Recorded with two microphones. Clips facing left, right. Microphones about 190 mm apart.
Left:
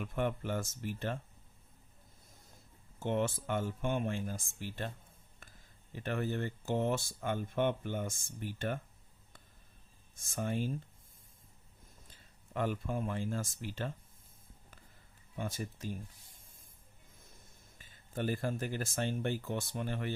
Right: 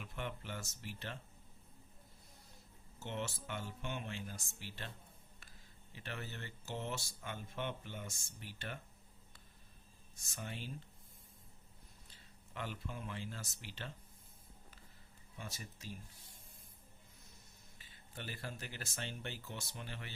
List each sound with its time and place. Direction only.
0.0 s speech: 50° left (ahead or behind)
3.0 s speech: 50° left (ahead or behind)
5.9 s speech: 50° left (ahead or behind)
10.2 s speech: 50° left (ahead or behind)
12.0 s speech: 50° left (ahead or behind)
15.4 s speech: 55° left (ahead or behind)
17.7 s speech: 45° left (ahead or behind)